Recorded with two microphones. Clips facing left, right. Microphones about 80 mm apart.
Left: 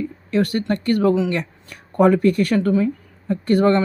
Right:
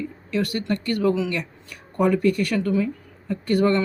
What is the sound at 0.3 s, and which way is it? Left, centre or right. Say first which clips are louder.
Speech: left 4 dB; left.